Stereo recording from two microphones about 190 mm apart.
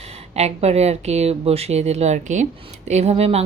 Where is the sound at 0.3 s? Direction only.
35° right (ahead or behind).